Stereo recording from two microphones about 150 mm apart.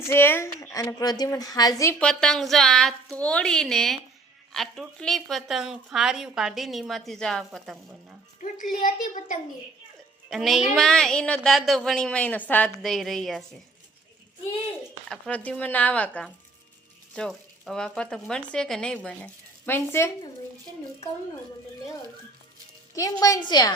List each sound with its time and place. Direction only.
0.1 s a woman's voice: 15° left (ahead or behind)
2.0 s speech: 5° left (ahead or behind)
8.4 s a child's voice: 65° left (ahead or behind)
10.2 s speech: centre (ahead or behind)
15.1 s a woman's voice: 10° left (ahead or behind)
23.0 s a woman's voice: 25° left (ahead or behind)